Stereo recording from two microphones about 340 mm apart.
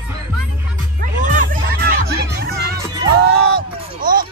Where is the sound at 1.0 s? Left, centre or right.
Right.